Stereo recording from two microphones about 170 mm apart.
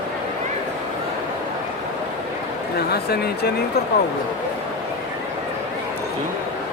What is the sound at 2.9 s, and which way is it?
Speech, 70° left (ahead or behind).